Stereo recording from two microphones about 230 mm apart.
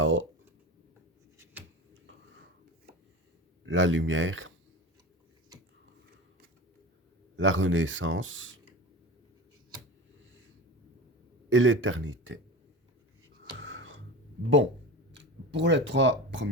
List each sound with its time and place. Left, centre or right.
0.0 s speech: right
3.7 s speech: right
7.3 s speech: right
11.4 s a man's voice: right
13.6 s a sound: right
15.1 s speech: right